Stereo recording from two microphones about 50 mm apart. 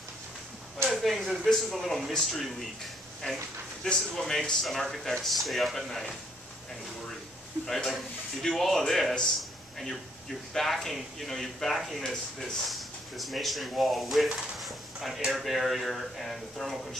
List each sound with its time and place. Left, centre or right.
0.8 s speech: centre
3.8 s a man's voice: centre
7.6 s speech: centre
9.4 s a sound: centre
10.5 s speech: centre